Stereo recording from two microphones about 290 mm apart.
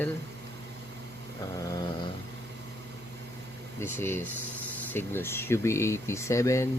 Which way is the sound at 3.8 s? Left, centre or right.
Centre.